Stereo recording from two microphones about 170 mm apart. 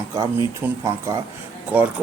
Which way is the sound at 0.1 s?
15° right (ahead or behind).